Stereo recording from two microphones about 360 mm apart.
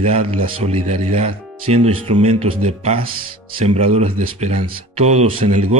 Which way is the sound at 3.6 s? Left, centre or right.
Centre.